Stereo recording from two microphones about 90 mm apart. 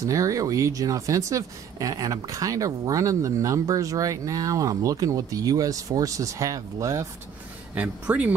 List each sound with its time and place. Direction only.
0.0 s speech: 40° right (ahead or behind)
7.7 s speech: 15° right (ahead or behind)